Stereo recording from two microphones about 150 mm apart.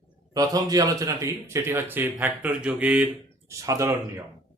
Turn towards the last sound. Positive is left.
turn(degrees=-20)  # may be behind; listen again after turning